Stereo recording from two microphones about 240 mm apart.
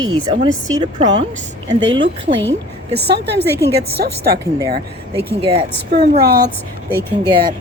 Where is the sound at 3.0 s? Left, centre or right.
Right.